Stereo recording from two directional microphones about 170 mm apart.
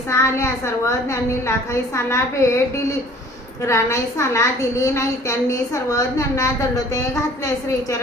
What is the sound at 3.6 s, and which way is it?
A woman's voice, 15° left (ahead or behind).